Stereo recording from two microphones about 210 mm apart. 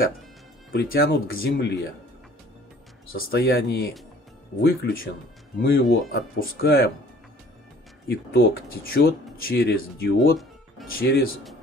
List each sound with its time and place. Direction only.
0.7 s speech: 45° left (ahead or behind)
3.2 s speech: 45° left (ahead or behind)
8.1 s speech: 50° left (ahead or behind)